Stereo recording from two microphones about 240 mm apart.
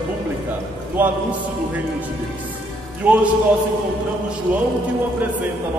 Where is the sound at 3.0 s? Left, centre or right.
Centre.